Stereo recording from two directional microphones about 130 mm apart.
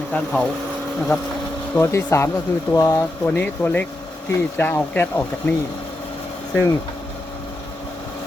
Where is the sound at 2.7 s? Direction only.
30° left (ahead or behind).